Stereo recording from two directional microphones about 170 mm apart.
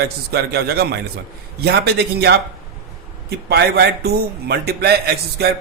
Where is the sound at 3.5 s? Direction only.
70° right (ahead or behind).